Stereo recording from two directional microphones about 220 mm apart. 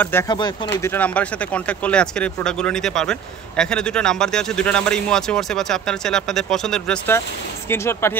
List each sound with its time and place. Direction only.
0.0 s speech: 10° left (ahead or behind)